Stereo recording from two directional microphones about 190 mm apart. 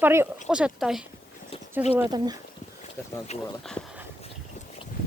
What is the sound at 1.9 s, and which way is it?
Speech, 15° right (ahead or behind).